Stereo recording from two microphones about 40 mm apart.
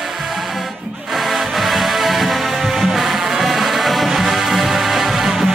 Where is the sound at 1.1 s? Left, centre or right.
Centre.